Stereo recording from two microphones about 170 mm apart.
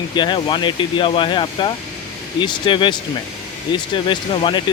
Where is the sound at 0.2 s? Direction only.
25° left (ahead or behind).